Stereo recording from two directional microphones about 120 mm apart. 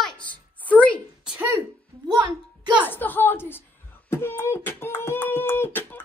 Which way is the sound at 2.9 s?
15° left (ahead or behind).